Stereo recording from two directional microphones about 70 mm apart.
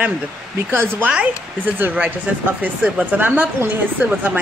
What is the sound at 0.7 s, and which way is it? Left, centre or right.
Speech, right.